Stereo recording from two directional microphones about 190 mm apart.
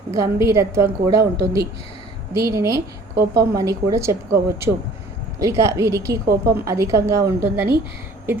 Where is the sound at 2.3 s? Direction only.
15° right (ahead or behind).